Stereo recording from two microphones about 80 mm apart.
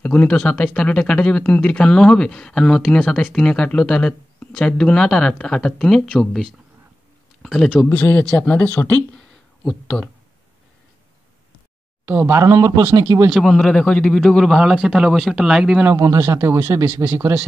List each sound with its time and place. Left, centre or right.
0.0 s speech: centre
7.4 s speech: centre
7.7 s speech: centre
9.1 s a sound: centre
12.1 s speech: right
12.4 s speech: right
13.3 s speech: centre
14.2 s a man's voice: centre
16.0 s speech: right